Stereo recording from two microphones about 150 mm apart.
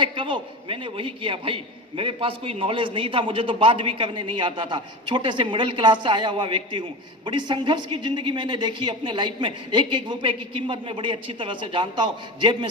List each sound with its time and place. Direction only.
0.0 s a man's voice: 35° right (ahead or behind)